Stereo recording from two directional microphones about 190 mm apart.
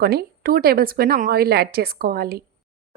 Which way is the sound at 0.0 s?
55° right (ahead or behind).